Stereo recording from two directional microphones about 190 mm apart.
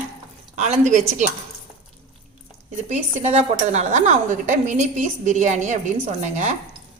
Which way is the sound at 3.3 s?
35° right (ahead or behind).